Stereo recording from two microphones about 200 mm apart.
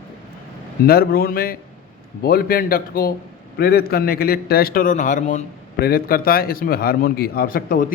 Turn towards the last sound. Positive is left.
turn(degrees=45)  # may be behind; listen again after turning